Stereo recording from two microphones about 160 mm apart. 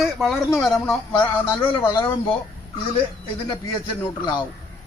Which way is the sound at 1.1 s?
20° left (ahead or behind).